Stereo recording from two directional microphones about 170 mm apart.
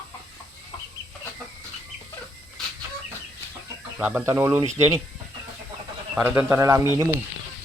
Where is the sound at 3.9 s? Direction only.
10° right (ahead or behind).